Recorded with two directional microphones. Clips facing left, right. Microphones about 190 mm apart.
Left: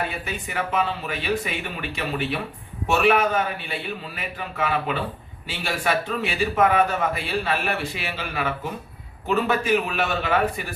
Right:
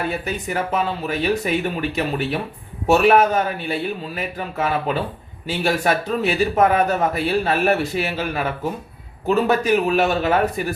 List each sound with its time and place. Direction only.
0.3 s a man's voice: 40° right (ahead or behind)